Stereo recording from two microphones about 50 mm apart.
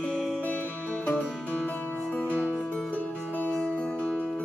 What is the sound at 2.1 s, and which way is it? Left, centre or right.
Music, left.